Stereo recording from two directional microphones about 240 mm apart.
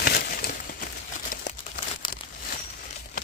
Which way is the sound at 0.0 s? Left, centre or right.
Left.